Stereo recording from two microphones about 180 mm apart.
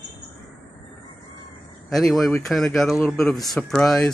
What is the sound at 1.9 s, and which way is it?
Speech, centre (ahead or behind).